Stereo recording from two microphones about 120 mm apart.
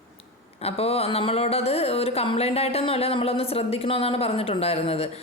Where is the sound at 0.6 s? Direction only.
55° left (ahead or behind).